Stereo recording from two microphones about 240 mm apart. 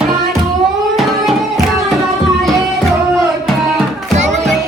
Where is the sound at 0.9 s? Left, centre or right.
Centre.